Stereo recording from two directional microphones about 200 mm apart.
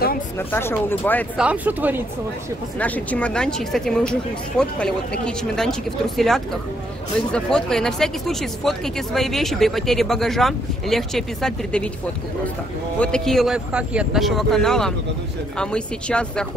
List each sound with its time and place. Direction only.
0.5 s speech: 10° left (ahead or behind)
1.4 s speech: 5° right (ahead or behind)
2.8 s speech: 5° left (ahead or behind)
13.0 s speech: 5° left (ahead or behind)